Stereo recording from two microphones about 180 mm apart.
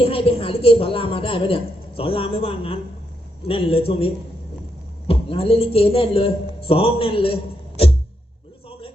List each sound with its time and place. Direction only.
0.0 s a woman's voice: 30° left (ahead or behind)